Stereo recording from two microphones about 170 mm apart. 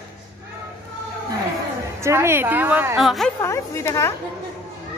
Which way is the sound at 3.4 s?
15° left (ahead or behind).